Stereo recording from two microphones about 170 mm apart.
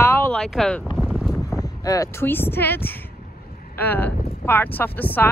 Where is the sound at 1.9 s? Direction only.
15° left (ahead or behind).